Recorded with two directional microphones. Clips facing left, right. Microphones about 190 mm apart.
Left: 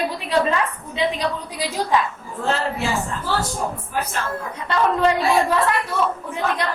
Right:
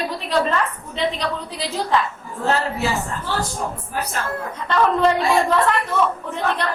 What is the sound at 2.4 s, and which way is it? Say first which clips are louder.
Speech: right 2 dB; 40° right (ahead or behind).